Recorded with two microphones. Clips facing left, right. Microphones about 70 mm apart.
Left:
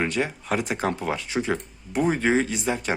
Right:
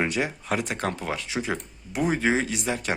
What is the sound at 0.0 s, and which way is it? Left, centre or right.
Speech, centre.